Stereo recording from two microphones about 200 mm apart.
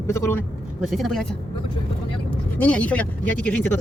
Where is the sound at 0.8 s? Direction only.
Centre (ahead or behind).